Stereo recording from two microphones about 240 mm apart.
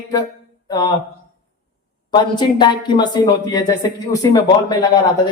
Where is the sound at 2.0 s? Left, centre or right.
Centre.